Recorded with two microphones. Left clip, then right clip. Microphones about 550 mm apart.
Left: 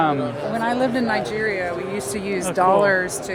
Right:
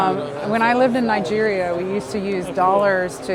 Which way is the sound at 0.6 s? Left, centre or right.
Right.